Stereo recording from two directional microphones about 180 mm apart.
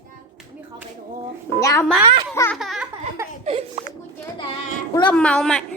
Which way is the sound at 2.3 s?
15° left (ahead or behind).